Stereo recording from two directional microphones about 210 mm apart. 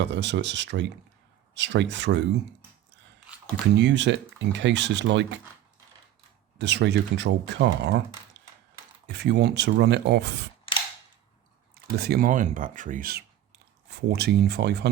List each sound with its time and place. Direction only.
0.0 s speech: 55° right (ahead or behind)
3.8 s speech: 60° right (ahead or behind)
6.6 s speech: 55° right (ahead or behind)
9.0 s speech: 55° right (ahead or behind)
11.7 s speech: 50° right (ahead or behind)